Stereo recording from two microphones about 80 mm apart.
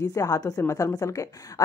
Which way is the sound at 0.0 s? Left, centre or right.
Left.